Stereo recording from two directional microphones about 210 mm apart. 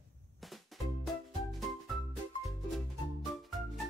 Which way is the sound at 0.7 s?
Centre (ahead or behind).